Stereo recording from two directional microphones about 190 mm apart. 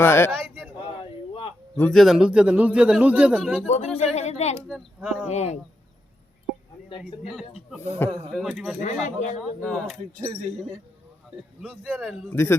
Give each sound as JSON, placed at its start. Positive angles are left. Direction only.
{"t": 0.0, "sound": "speech", "side_deg": 10}
{"t": 1.8, "sound": "a man's voice", "side_deg": 0}
{"t": 3.7, "sound": "speech", "side_deg": 35}
{"t": 4.7, "sound": "a man's voice", "side_deg": 0}
{"t": 5.3, "sound": "speech", "side_deg": 35}
{"t": 7.0, "sound": "a man's voice", "side_deg": 0}
{"t": 8.8, "sound": "speech", "side_deg": 40}
{"t": 9.4, "sound": "a man's voice", "side_deg": 0}
{"t": 10.2, "sound": "speech", "side_deg": -35}
{"t": 11.6, "sound": "a man's voice", "side_deg": 5}
{"t": 12.3, "sound": "speech", "side_deg": 15}